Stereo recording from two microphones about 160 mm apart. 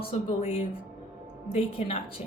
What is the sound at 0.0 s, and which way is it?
Speech, 40° left (ahead or behind).